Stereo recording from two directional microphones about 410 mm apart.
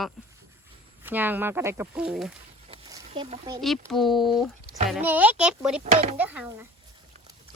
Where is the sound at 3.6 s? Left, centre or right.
Centre.